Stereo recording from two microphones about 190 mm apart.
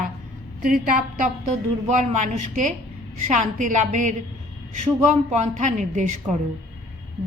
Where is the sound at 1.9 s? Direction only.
40° right (ahead or behind).